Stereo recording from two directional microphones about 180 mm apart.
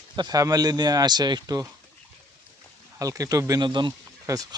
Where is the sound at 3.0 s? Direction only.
20° right (ahead or behind).